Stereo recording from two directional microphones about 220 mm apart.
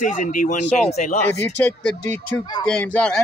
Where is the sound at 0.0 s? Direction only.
35° left (ahead or behind).